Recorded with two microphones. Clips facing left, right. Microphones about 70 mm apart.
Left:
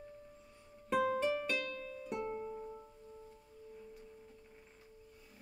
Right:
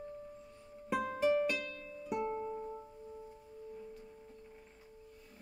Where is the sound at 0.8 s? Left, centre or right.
Centre.